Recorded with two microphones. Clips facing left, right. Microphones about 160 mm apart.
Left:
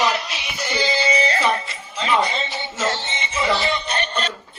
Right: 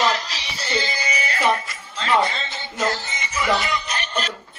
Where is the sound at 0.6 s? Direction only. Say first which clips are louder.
Left 4 dB; 20° left (ahead or behind).